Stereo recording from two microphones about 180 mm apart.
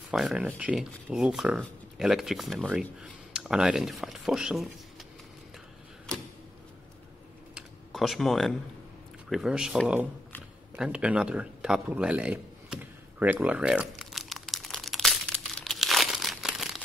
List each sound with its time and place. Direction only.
0.1 s speech: centre (ahead or behind)
7.5 s computer keyboard: centre (ahead or behind)
9.3 s speech: 5° right (ahead or behind)
10.8 s a sound: 5° right (ahead or behind)